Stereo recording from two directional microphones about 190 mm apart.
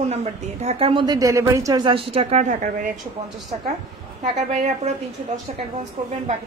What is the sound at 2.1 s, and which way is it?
A woman's voice, 35° right (ahead or behind).